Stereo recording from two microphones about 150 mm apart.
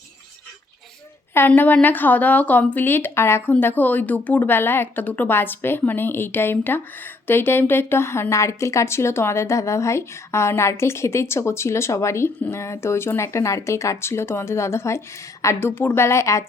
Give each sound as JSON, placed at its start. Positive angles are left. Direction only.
{"t": 1.3, "sound": "speech", "side_deg": 15}